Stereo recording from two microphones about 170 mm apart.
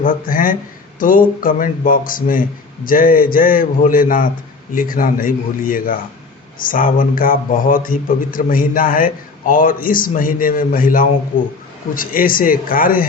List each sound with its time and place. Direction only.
0.0 s speech: 55° left (ahead or behind)